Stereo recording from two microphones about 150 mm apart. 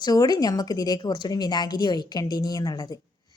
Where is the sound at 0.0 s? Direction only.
25° left (ahead or behind).